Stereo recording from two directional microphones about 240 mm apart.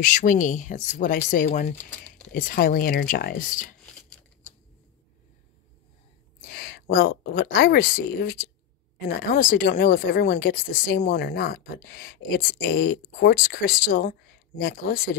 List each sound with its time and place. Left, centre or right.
0.0 s speech: left
4.1 s a sound: centre
6.5 s speech: left